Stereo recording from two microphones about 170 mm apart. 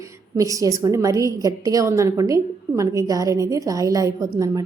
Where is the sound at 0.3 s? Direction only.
20° right (ahead or behind).